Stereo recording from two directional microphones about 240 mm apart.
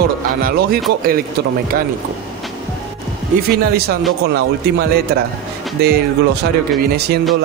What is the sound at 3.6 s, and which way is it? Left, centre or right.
Speech, right.